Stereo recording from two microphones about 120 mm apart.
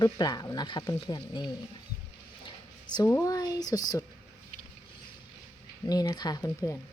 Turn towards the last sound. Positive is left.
turn(degrees=20)  # may be behind; listen again after turning